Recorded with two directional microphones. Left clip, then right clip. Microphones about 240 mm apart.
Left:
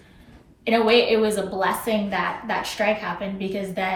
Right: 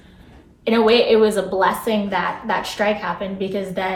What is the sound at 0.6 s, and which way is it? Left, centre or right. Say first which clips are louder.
A woman's voice: right 3 dB; centre.